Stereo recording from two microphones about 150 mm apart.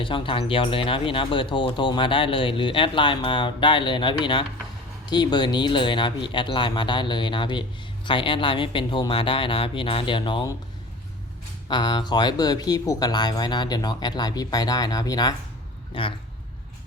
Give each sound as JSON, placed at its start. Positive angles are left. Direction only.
{"t": 0.0, "sound": "speech", "side_deg": 35}
{"t": 11.7, "sound": "speech", "side_deg": 30}